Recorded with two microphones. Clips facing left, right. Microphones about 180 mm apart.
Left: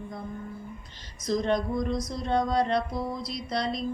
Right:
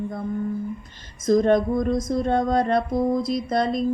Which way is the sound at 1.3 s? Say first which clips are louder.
Right 8 dB; 50° right (ahead or behind).